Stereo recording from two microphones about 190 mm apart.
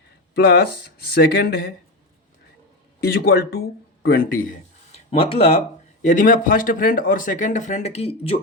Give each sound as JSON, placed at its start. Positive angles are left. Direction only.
{"t": 0.3, "sound": "speech", "side_deg": 55}
{"t": 3.0, "sound": "speech", "side_deg": 55}
{"t": 5.1, "sound": "speech", "side_deg": 30}